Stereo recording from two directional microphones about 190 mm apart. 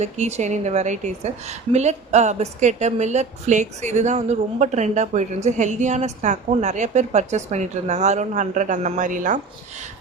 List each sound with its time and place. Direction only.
0.0 s a woman's voice: 35° right (ahead or behind)